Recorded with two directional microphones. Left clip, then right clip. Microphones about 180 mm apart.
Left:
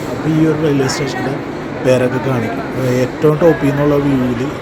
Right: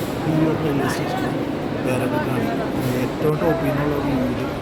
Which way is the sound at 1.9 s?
30° left (ahead or behind).